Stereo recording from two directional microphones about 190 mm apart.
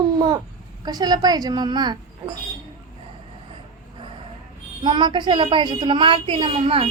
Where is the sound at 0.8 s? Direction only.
20° right (ahead or behind).